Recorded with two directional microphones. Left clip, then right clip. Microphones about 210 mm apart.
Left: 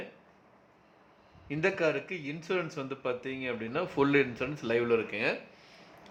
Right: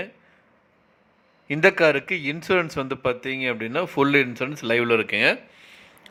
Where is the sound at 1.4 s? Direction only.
20° right (ahead or behind).